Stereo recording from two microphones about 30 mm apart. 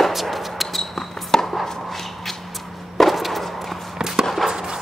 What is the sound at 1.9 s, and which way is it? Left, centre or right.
Shuffle, centre.